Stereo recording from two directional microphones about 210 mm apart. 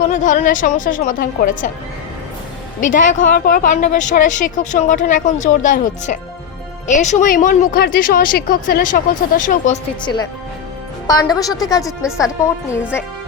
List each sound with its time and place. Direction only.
0.1 s speech: 35° left (ahead or behind)
2.8 s speech: 40° left (ahead or behind)
11.0 s a woman's voice: 20° left (ahead or behind)
11.8 s speech: centre (ahead or behind)